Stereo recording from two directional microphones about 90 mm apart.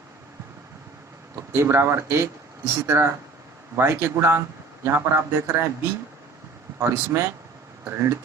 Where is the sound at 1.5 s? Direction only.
30° right (ahead or behind).